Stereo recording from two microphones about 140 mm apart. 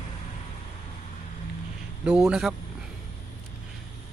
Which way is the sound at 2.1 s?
5° right (ahead or behind).